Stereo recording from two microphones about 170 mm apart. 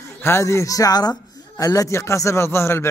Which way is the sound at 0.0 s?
15° left (ahead or behind).